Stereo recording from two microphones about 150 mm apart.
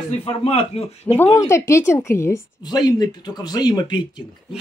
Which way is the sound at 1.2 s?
20° left (ahead or behind).